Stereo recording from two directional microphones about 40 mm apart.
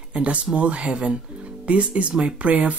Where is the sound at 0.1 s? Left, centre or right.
Right.